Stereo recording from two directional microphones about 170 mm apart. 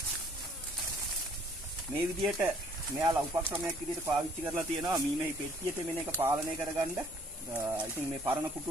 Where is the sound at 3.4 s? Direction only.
10° right (ahead or behind).